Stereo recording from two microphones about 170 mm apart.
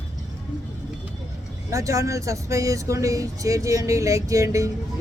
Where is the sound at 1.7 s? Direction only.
20° right (ahead or behind).